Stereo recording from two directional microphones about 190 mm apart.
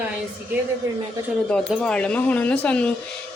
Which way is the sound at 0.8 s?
15° right (ahead or behind).